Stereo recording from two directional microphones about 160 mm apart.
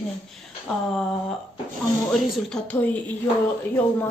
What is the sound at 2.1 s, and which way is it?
Speech, 5° left (ahead or behind).